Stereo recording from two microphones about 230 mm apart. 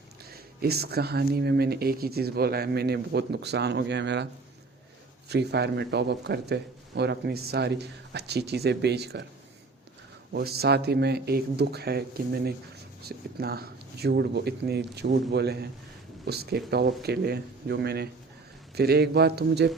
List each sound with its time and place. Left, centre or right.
0.3 s speech: right
5.3 s speech: right
10.3 s speech: right